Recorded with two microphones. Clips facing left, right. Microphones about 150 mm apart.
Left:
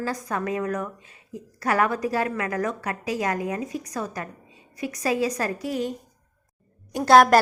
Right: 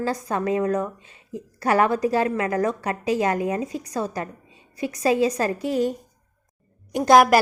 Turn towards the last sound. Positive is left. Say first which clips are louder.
# even
turn(degrees=-10)  # may be behind; listen again after turning